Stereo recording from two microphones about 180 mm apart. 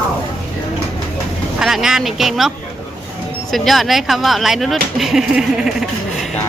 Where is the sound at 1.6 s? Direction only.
Centre (ahead or behind).